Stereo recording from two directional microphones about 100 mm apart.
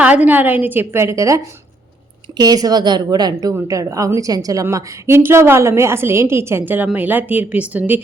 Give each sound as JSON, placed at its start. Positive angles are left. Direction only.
{"t": 0.0, "sound": "a woman's voice", "side_deg": -15}
{"t": 2.4, "sound": "a woman's voice", "side_deg": -40}
{"t": 4.6, "sound": "a woman's voice", "side_deg": -25}